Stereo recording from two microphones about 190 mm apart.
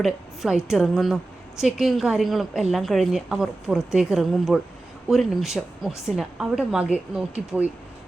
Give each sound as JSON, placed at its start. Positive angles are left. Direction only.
{"t": 0.0, "sound": "a woman's voice", "side_deg": 0}